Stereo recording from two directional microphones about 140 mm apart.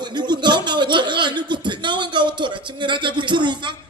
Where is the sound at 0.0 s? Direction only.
30° right (ahead or behind).